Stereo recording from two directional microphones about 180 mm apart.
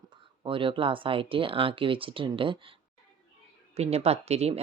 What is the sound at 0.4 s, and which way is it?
Speech, 30° right (ahead or behind).